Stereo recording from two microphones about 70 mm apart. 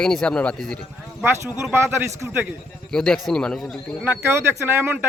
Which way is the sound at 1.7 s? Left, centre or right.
Right.